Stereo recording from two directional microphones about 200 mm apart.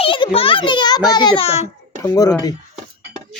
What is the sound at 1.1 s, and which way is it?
Speech, 20° left (ahead or behind).